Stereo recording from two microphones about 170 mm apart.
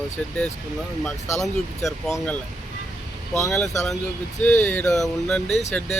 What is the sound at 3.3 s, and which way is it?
Speech, centre (ahead or behind).